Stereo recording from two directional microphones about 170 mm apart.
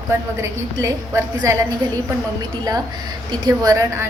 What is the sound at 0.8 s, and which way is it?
Speech, 20° right (ahead or behind).